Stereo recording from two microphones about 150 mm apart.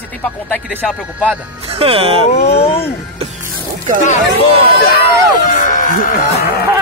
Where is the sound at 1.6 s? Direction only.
40° right (ahead or behind).